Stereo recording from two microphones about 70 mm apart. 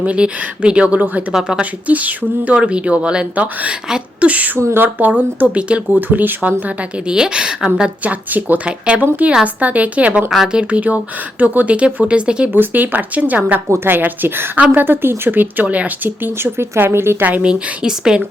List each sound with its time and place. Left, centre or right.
0.0 s speech: centre
1.3 s a woman's voice: centre
1.9 s speech: right
7.1 s a woman's voice: centre
10.2 s speech: centre
12.5 s speech: right
13.7 s a woman's voice: right; by 15.9 s centre
16.0 s speech: right
17.2 s a woman's voice: centre